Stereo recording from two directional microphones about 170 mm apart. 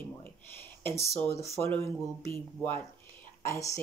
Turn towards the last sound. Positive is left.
turn(degrees=20)  # may be behind; listen again after turning